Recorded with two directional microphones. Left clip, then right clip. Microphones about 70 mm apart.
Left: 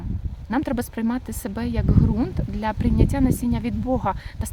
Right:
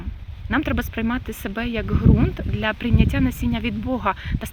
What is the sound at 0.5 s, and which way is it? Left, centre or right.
Speech, left.